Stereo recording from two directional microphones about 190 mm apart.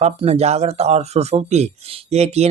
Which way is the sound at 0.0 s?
35° right (ahead or behind).